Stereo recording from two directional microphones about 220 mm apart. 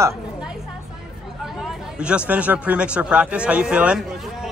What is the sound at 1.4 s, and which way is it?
Speech, 5° right (ahead or behind).